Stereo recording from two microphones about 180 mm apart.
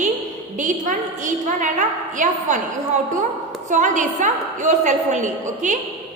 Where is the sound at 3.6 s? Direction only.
45° right (ahead or behind).